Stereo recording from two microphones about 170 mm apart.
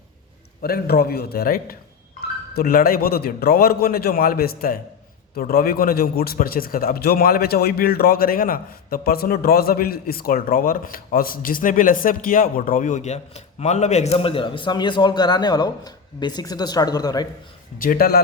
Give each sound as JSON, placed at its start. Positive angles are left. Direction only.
{"t": 0.6, "sound": "a man's voice", "side_deg": 65}
{"t": 17.7, "sound": "a man's voice", "side_deg": 55}